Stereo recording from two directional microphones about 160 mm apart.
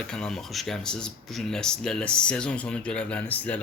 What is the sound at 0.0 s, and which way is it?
Speech, 5° left (ahead or behind).